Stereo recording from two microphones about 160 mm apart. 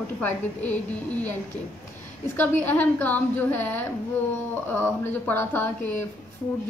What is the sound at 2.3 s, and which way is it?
Speech, 10° left (ahead or behind).